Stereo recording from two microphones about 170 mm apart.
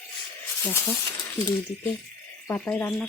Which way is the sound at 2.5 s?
10° left (ahead or behind).